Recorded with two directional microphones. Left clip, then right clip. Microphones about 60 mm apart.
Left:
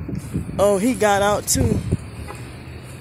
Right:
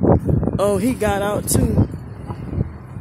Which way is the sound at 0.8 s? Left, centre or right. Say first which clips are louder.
Left 3 dB; right.